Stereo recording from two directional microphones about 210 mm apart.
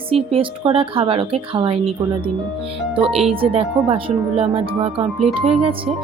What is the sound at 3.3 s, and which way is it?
Speech, 25° right (ahead or behind).